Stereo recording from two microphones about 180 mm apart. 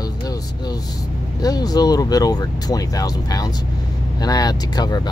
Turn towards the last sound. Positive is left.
turn(degrees=20)  # may be behind; listen again after turning